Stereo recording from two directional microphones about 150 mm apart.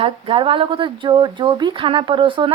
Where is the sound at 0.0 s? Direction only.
35° right (ahead or behind).